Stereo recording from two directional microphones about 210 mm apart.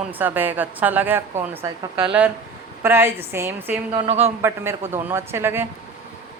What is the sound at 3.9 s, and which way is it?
Speech, 25° right (ahead or behind).